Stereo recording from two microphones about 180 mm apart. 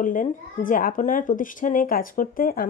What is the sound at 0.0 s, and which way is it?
A woman's voice, 45° left (ahead or behind).